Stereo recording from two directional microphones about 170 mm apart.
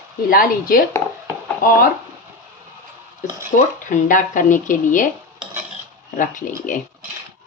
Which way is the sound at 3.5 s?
50° left (ahead or behind).